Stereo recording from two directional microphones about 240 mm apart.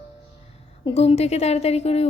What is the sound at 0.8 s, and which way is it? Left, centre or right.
A woman's voice, left.